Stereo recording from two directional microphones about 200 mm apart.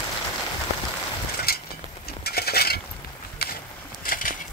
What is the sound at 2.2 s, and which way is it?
Mechanisms, 50° left (ahead or behind).